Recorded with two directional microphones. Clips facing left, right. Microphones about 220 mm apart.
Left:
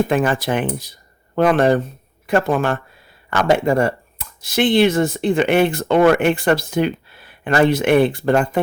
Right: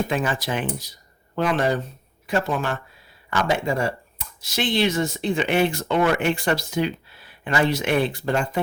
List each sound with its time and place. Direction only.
0.1 s speech: 55° left (ahead or behind)